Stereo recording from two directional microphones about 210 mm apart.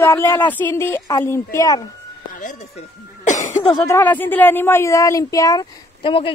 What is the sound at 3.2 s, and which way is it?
Cough, 35° left (ahead or behind).